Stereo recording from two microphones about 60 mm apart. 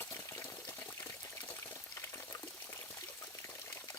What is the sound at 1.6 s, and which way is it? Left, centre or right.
Pour, left.